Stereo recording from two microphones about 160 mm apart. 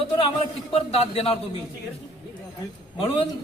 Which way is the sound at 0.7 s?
40° left (ahead or behind).